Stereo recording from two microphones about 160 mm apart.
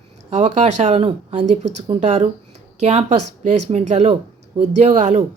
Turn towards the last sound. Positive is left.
turn(degrees=-35)  # may be behind; listen again after turning